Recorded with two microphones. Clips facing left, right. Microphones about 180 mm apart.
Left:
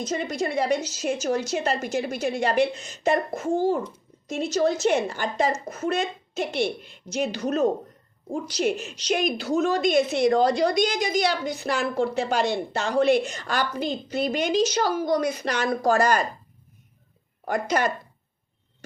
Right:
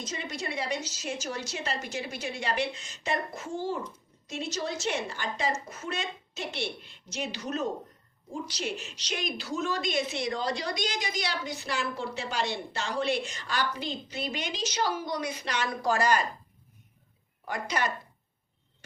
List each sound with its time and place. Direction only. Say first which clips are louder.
0.0 s a woman's voice: left 9 dB; 50° left (ahead or behind)
17.4 s a woman's voice: left 7 dB; 45° left (ahead or behind)